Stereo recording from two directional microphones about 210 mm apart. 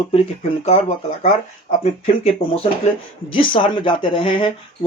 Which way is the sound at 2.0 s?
25° left (ahead or behind).